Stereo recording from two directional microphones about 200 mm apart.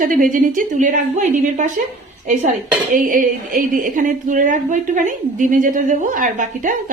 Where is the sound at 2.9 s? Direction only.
45° right (ahead or behind).